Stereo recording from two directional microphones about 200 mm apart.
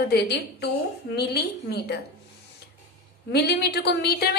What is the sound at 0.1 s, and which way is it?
A woman's voice, 55° left (ahead or behind).